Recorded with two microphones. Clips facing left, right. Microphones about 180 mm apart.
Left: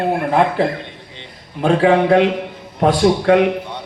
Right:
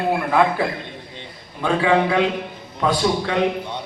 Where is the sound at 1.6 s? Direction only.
50° left (ahead or behind).